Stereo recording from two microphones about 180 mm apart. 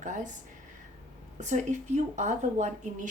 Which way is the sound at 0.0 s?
45° right (ahead or behind).